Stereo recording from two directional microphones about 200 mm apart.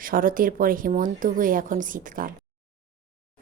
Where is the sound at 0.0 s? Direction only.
45° right (ahead or behind).